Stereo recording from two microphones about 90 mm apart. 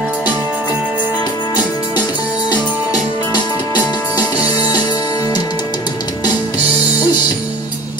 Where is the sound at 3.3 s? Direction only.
55° left (ahead or behind).